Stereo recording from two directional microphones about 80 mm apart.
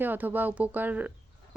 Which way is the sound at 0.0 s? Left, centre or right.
Right.